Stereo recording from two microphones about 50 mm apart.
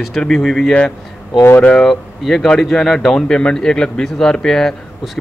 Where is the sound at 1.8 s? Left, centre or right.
Centre.